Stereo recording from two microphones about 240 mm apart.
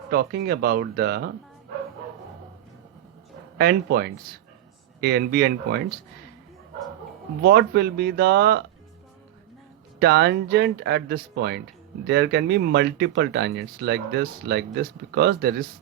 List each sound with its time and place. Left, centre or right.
0.1 s speech: right
3.6 s speech: right
7.4 s speech: right
10.0 s speech: right